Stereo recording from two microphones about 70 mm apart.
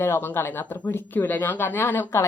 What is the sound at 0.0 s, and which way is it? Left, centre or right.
A woman's voice, left.